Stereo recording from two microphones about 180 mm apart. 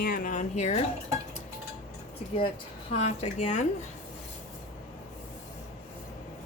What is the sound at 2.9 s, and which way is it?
Speech, 35° left (ahead or behind).